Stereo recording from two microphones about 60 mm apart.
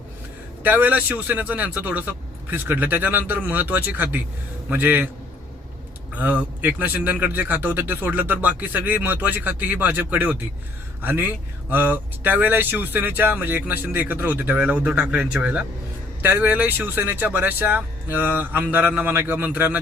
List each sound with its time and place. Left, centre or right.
0.6 s a man's voice: right
6.1 s a man's voice: right